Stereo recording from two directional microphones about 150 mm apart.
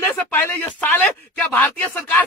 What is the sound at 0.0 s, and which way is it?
Speech, 10° left (ahead or behind).